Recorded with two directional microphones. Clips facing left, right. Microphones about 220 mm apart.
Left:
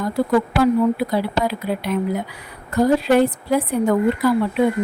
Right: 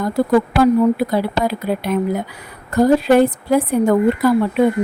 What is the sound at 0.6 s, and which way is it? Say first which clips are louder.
Speech: right 3 dB; 45° right (ahead or behind).